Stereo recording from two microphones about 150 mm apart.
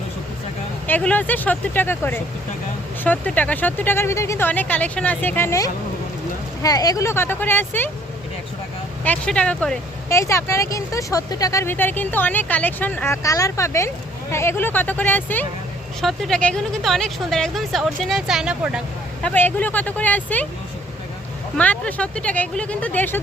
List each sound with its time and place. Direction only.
0.9 s speech: 10° left (ahead or behind)
9.0 s speech: 5° left (ahead or behind)
10.1 s speech: 20° left (ahead or behind)
13.2 s speech: 20° left (ahead or behind)
16.0 s speech: centre (ahead or behind)
19.2 s speech: 10° left (ahead or behind)
21.6 s speech: 10° left (ahead or behind)